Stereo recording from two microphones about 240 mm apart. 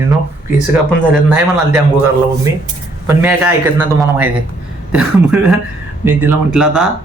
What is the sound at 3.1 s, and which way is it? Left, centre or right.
A man's voice, centre.